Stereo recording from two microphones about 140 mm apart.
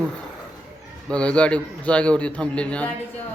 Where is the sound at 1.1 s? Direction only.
10° left (ahead or behind).